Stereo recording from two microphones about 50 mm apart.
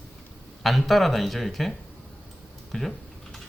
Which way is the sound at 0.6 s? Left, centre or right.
Centre.